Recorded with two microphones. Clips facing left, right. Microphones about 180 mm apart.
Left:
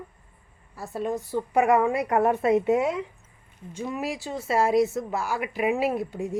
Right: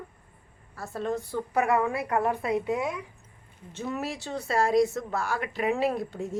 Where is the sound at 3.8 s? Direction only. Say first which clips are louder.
Left 2 dB; 10° left (ahead or behind).